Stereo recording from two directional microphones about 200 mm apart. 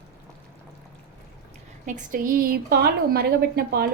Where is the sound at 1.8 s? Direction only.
40° right (ahead or behind).